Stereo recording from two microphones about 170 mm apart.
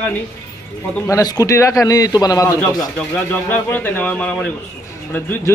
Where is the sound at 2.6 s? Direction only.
5° left (ahead or behind).